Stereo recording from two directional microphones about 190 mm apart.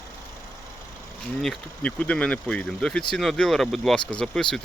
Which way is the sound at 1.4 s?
5° left (ahead or behind).